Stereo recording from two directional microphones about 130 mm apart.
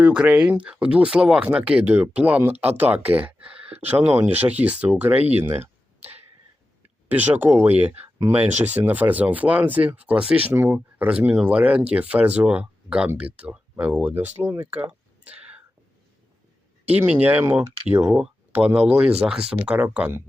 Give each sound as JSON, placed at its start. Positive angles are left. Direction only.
{"t": 0.0, "sound": "speech", "side_deg": -10}
{"t": 7.1, "sound": "speech", "side_deg": -15}
{"t": 17.0, "sound": "speech", "side_deg": -15}